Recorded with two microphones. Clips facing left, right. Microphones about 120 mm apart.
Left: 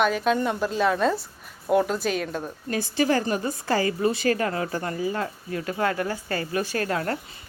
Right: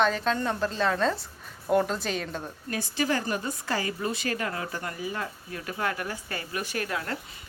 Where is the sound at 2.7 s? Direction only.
30° left (ahead or behind).